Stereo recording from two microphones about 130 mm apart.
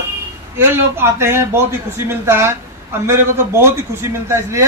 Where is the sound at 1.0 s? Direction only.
20° right (ahead or behind).